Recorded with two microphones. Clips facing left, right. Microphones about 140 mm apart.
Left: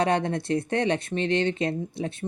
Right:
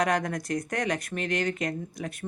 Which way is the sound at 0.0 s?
30° left (ahead or behind).